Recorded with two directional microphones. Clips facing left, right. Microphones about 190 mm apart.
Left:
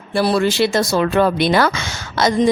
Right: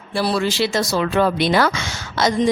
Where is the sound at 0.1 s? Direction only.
55° left (ahead or behind).